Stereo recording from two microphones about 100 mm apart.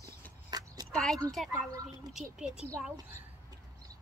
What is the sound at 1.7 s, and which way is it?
Speech, 35° right (ahead or behind).